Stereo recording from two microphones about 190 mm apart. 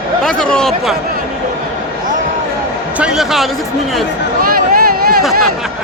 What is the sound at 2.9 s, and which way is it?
Speech, 5° right (ahead or behind).